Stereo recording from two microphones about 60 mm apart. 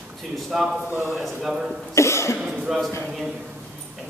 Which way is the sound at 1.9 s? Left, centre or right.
Left.